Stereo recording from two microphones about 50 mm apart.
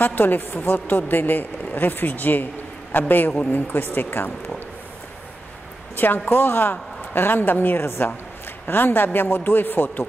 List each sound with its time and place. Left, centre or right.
0.0 s a woman's voice: left
5.9 s a woman's voice: left
7.8 s a woman's voice: left
8.6 s a woman's voice: left